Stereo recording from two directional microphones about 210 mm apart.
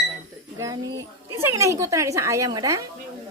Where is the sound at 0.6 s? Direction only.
15° right (ahead or behind).